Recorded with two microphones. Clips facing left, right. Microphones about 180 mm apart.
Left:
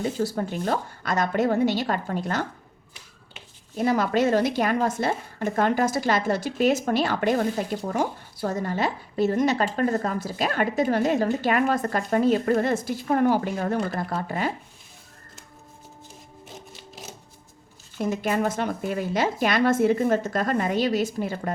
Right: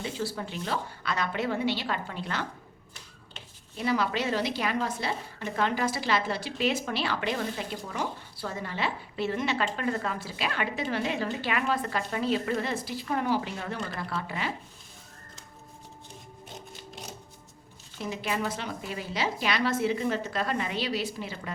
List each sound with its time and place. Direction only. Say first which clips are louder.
0.0 s a woman's voice: left 7 dB; 45° left (ahead or behind)
3.8 s a woman's voice: left 6 dB; 45° left (ahead or behind)
16.5 s music: even; centre (ahead or behind)
18.0 s a woman's voice: left 7 dB; 45° left (ahead or behind)